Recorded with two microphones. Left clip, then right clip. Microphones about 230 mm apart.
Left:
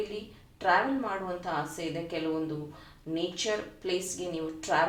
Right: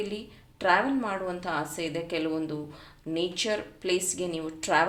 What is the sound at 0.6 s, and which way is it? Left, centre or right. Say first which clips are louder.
Speech: right 2 dB; right.